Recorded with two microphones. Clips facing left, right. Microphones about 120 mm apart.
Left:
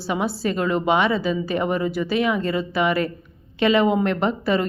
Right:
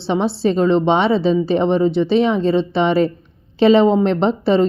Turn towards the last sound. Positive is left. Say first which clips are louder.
# right 6 dB
turn(degrees=-30)  # may be behind; listen again after turning